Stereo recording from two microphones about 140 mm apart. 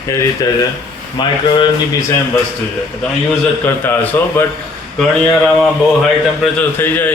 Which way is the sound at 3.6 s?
15° left (ahead or behind).